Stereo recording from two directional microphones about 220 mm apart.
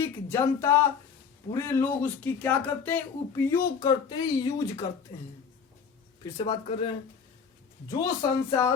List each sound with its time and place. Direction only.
0.0 s speech: 10° left (ahead or behind)
6.2 s speech: 20° left (ahead or behind)